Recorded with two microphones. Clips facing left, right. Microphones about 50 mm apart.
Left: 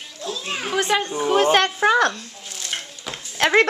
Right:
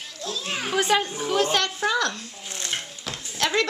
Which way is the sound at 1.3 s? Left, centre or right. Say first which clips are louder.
Left 7 dB; left.